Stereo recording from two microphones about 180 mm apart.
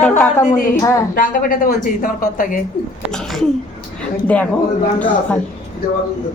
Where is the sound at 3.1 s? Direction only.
5° left (ahead or behind).